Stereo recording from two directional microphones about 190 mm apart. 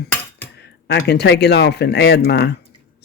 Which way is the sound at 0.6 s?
60° left (ahead or behind).